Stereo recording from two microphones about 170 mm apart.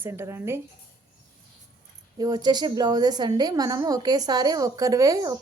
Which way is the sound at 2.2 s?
25° right (ahead or behind).